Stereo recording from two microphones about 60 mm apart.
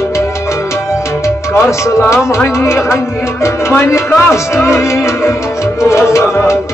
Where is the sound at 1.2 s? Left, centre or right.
Left.